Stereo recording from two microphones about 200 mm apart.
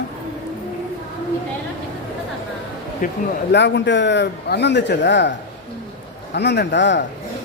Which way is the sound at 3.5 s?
60° left (ahead or behind).